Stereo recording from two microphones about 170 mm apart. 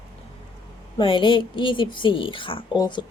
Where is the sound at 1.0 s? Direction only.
30° left (ahead or behind).